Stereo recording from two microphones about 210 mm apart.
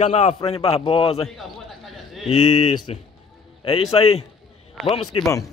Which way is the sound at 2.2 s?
30° left (ahead or behind).